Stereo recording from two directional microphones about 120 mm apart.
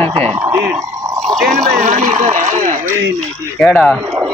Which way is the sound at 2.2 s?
85° right.